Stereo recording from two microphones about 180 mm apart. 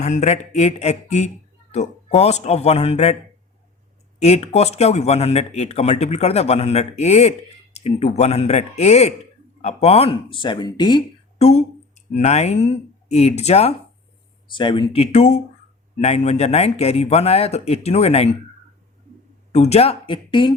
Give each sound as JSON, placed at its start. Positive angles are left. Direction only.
{"t": 0.0, "sound": "speech", "side_deg": 40}
{"t": 4.2, "sound": "speech", "side_deg": 35}
{"t": 11.3, "sound": "speech", "side_deg": 40}
{"t": 14.4, "sound": "speech", "side_deg": 25}
{"t": 19.5, "sound": "speech", "side_deg": 35}